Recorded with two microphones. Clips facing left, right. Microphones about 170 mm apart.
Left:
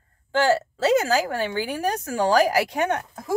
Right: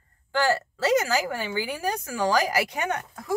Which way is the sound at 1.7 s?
60° left (ahead or behind).